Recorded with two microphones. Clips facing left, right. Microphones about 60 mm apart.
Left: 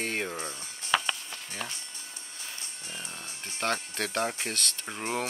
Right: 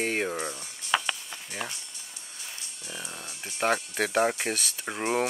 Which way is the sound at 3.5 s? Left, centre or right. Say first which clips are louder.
Right 5 dB; centre.